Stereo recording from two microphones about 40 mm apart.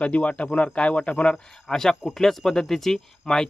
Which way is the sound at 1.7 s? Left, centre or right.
Centre.